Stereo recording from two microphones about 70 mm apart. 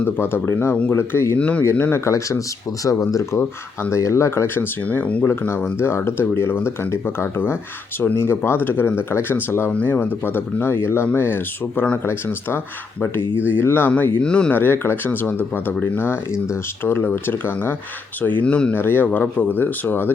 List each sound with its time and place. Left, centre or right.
0.0 s speech: left
1.4 s speech: centre
1.9 s speech: left
5.2 s speech: left
13.5 s speech: left
14.2 s speech: centre
14.5 s speech: left
18.4 s speech: centre
18.7 s speech: left